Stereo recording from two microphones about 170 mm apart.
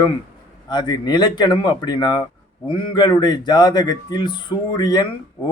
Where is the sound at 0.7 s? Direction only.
25° left (ahead or behind).